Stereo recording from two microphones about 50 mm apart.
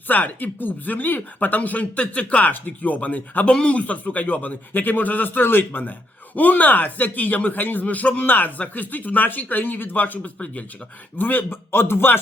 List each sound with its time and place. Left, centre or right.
0.1 s speech: left
3.4 s speech: left
6.3 s speech: left
11.2 s speech: left